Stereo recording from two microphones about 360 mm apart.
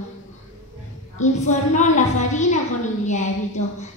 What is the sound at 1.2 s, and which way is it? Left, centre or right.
A child's voice, centre.